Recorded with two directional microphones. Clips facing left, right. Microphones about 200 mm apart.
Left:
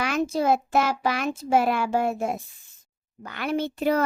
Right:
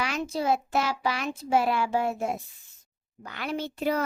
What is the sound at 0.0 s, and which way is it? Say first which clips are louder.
A child's voice: left 5 dB; 50° left (ahead or behind).